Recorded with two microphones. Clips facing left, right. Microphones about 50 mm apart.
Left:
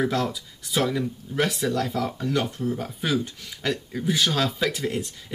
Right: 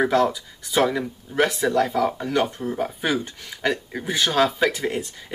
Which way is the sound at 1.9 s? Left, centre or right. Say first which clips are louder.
Right 4 dB; centre.